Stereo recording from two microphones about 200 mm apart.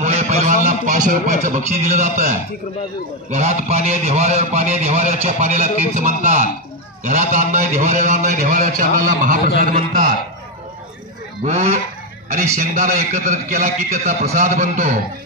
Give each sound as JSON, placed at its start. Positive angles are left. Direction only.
{"t": 0.0, "sound": "a sound", "side_deg": -35}
{"t": 0.7, "sound": "a man's voice", "side_deg": -40}
{"t": 12.5, "sound": "a man's voice", "side_deg": -40}